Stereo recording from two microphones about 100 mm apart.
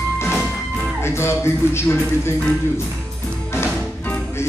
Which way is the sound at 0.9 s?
25° left (ahead or behind).